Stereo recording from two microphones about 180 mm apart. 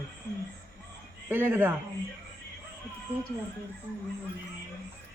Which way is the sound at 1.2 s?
10° right (ahead or behind).